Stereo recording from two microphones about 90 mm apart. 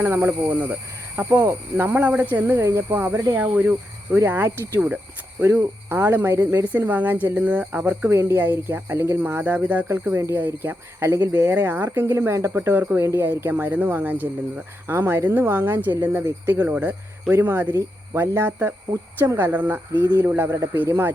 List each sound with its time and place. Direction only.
0.0 s speech: 25° right (ahead or behind)